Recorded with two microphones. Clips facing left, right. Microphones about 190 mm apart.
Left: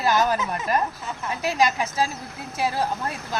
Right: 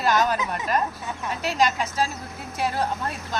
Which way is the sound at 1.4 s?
10° left (ahead or behind).